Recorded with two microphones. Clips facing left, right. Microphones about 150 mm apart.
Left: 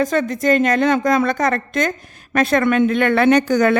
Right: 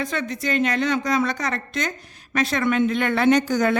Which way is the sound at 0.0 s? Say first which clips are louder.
Left 9 dB; 45° left (ahead or behind).